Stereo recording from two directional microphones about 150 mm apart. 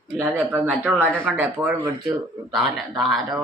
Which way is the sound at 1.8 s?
25° right (ahead or behind).